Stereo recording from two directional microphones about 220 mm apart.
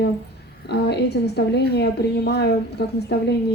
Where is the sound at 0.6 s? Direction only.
50° left (ahead or behind).